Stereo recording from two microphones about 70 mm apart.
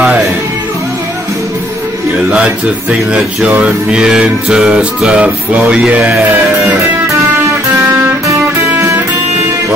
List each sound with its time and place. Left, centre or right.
2.3 s music: centre
4.0 s music: centre
8.6 s music: right